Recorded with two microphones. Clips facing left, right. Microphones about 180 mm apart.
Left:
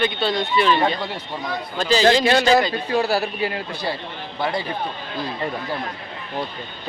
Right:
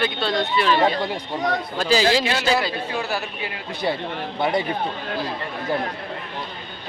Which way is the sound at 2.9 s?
35° left (ahead or behind).